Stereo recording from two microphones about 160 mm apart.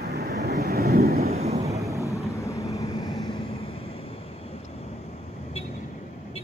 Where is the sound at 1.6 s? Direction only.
20° right (ahead or behind).